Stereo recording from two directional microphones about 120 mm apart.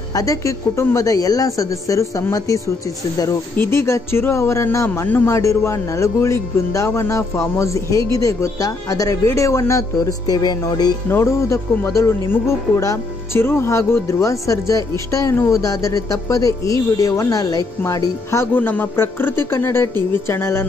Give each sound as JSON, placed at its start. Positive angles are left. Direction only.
{"t": 0.1, "sound": "speech", "side_deg": 30}
{"t": 11.1, "sound": "speech", "side_deg": 20}